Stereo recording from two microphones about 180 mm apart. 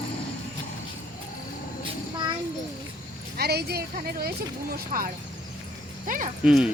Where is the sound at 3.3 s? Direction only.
60° right (ahead or behind).